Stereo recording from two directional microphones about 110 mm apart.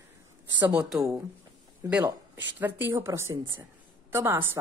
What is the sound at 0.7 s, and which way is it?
Speech, 5° right (ahead or behind).